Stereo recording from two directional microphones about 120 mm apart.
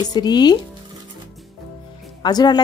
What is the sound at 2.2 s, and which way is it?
Speech, 35° left (ahead or behind).